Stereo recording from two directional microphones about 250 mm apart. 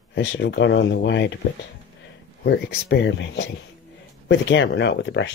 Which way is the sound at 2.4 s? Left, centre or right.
Left.